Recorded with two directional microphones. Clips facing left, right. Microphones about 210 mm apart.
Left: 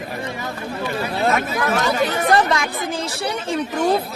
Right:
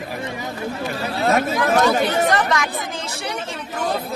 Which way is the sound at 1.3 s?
45° right (ahead or behind).